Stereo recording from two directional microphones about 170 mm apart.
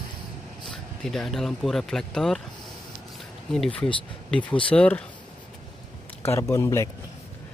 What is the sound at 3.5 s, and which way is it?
Speech, 5° left (ahead or behind).